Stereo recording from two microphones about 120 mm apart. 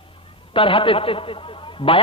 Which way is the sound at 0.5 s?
50° left (ahead or behind).